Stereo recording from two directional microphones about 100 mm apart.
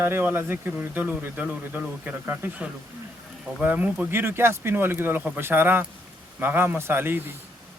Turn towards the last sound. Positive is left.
turn(degrees=-20)  # may be behind; listen again after turning